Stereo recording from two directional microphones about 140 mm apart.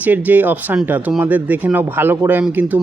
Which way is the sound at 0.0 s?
10° right (ahead or behind).